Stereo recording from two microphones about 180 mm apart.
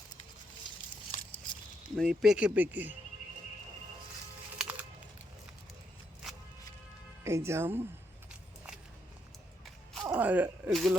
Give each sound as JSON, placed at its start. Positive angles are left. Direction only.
{"t": 1.1, "sound": "a sound", "side_deg": 45}
{"t": 2.0, "sound": "speech", "side_deg": -5}
{"t": 4.5, "sound": "music", "side_deg": -10}
{"t": 7.3, "sound": "speech", "side_deg": -15}
{"t": 9.6, "sound": "a sound", "side_deg": 0}
{"t": 10.1, "sound": "speech", "side_deg": -10}